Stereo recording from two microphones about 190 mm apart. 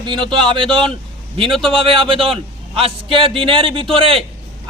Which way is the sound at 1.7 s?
30° right (ahead or behind).